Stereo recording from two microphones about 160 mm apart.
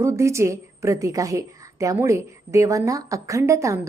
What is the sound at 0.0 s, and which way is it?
A woman's voice, 20° right (ahead or behind).